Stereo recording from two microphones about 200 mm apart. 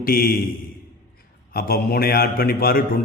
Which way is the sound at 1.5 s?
50° left (ahead or behind).